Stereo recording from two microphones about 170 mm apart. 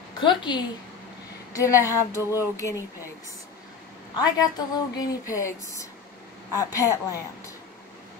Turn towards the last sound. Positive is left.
turn(degrees=20)  # may be behind; listen again after turning